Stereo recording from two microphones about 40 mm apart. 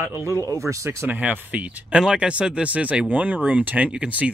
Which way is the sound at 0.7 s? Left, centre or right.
Right.